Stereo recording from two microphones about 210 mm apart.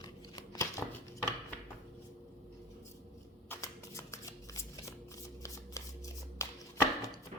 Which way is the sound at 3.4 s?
15° left (ahead or behind).